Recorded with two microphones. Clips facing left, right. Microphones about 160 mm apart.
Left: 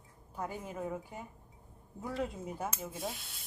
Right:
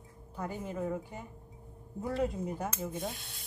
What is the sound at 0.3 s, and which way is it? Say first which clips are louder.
Speech: right 2 dB; 10° left (ahead or behind).